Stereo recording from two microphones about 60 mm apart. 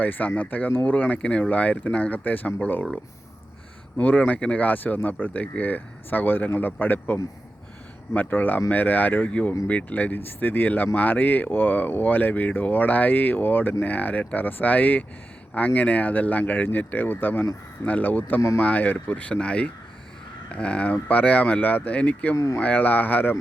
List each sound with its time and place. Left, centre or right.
0.0 s speech: left
3.9 s speech: left